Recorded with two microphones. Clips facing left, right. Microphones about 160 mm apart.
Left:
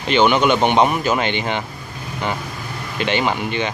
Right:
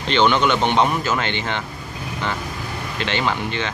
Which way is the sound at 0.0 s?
10° left (ahead or behind).